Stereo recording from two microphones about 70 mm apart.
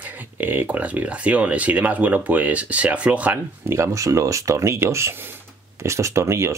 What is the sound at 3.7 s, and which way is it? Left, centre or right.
Speech, right.